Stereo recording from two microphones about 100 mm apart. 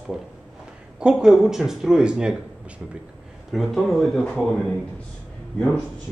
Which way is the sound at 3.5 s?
Centre (ahead or behind).